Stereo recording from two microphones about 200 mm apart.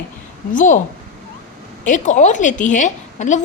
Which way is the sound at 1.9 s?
40° left (ahead or behind).